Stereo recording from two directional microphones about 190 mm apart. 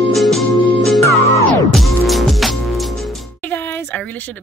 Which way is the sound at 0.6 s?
25° left (ahead or behind).